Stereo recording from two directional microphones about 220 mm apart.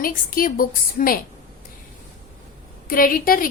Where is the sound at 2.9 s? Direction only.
40° left (ahead or behind).